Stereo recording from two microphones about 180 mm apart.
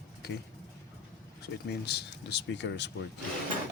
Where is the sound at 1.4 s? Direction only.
65° left (ahead or behind).